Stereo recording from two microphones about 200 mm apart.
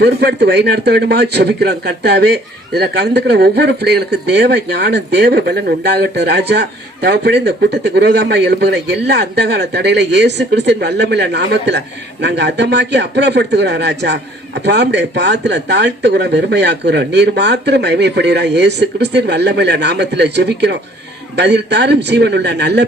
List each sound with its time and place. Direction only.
0.0 s speech: 55° right (ahead or behind)